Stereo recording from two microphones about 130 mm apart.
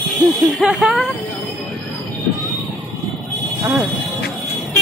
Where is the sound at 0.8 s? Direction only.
Centre (ahead or behind).